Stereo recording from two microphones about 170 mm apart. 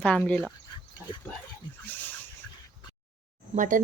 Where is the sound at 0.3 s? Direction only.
5° left (ahead or behind).